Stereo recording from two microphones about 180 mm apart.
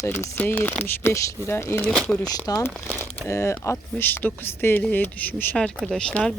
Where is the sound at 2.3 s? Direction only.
20° left (ahead or behind).